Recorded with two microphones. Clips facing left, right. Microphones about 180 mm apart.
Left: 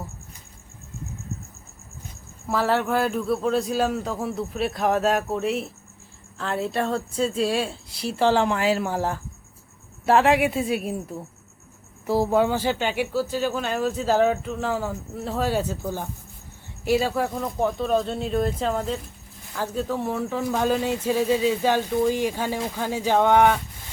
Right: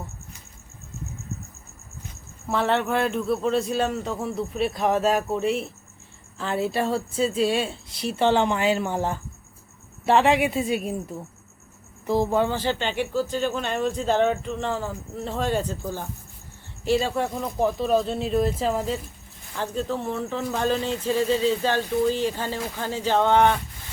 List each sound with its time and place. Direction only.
2.5 s a man's voice: 5° left (ahead or behind)
12.0 s a man's voice: 5° left (ahead or behind)